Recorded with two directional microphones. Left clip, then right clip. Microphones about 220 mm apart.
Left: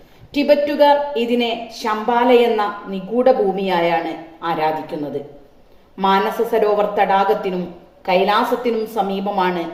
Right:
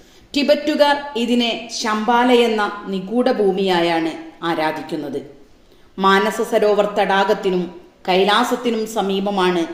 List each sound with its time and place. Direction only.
0.3 s a woman's voice: 40° right (ahead or behind)
6.0 s a woman's voice: 45° right (ahead or behind)